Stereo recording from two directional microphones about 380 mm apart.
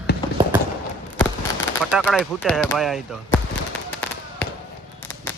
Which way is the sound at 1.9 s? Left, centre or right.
Centre.